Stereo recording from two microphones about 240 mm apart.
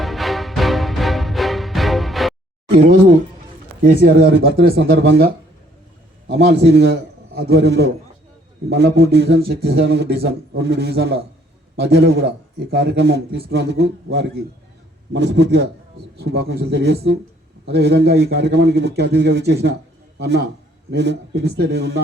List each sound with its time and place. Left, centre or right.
0.0 s music: centre
3.8 s a man's voice: right